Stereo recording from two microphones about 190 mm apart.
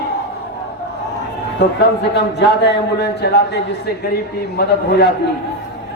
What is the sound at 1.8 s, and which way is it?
A man's voice, 65° left (ahead or behind).